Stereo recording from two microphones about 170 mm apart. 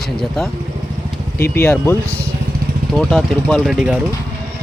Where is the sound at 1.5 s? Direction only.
10° left (ahead or behind).